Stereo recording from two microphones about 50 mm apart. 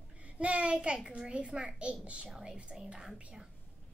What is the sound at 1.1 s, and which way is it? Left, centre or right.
A woman's voice, right.